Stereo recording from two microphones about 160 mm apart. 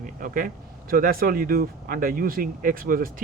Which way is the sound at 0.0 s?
60° right (ahead or behind).